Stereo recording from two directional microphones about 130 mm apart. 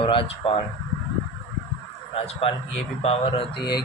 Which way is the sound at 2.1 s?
50° left (ahead or behind).